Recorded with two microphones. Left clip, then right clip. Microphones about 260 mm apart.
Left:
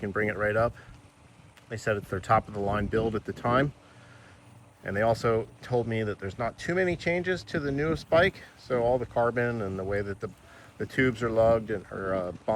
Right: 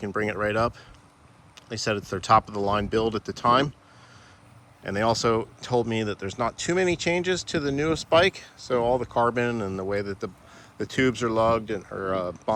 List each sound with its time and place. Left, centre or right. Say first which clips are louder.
0.0 s speech: right 1 dB; centre
4.9 s speech: right 2 dB; centre
9.6 s speech: right 3 dB; right
9.9 s speech: right 3 dB; centre